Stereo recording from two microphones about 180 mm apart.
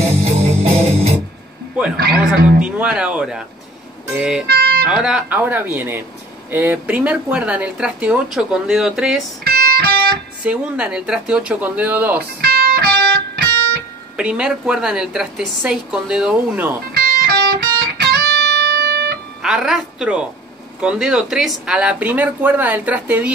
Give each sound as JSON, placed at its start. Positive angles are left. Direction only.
{"t": 0.2, "sound": "music", "side_deg": -35}
{"t": 2.0, "sound": "a man's voice", "side_deg": -60}
{"t": 2.6, "sound": "a woman's voice", "side_deg": -5}
{"t": 4.5, "sound": "music", "side_deg": -60}
{"t": 4.8, "sound": "speech", "side_deg": -5}
{"t": 9.4, "sound": "music", "side_deg": -55}
{"t": 10.4, "sound": "speech", "side_deg": -5}
{"t": 12.4, "sound": "music", "side_deg": -60}
{"t": 14.1, "sound": "a woman's voice", "side_deg": -5}
{"t": 16.9, "sound": "music", "side_deg": -60}
{"t": 19.4, "sound": "a woman's voice", "side_deg": -5}